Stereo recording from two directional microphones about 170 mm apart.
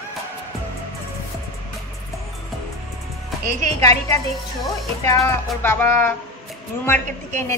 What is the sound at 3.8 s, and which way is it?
Speech, 20° left (ahead or behind).